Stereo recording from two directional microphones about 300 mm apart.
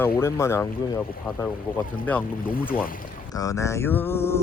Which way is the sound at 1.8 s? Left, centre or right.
Centre.